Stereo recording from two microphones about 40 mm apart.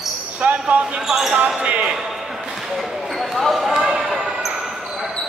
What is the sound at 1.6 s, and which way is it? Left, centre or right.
Speech, right.